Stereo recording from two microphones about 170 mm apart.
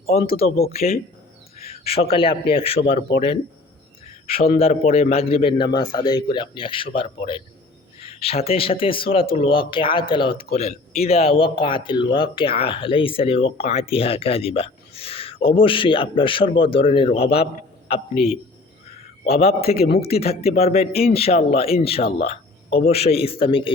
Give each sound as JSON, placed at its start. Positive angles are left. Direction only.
{"t": 0.2, "sound": "speech", "side_deg": 60}
{"t": 1.5, "sound": "a sound", "side_deg": 35}
{"t": 2.5, "sound": "speech", "side_deg": 35}
{"t": 4.4, "sound": "a man's voice", "side_deg": 35}
{"t": 19.2, "sound": "speech", "side_deg": 35}